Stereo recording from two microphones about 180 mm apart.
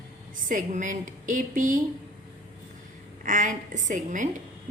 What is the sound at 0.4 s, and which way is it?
A woman's voice, 45° right (ahead or behind).